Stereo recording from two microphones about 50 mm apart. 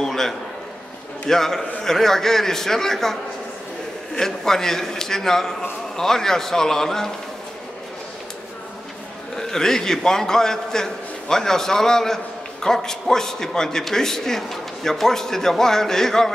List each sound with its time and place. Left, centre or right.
0.0 s a sound: centre
1.3 s a man's voice: centre
9.4 s a man's voice: centre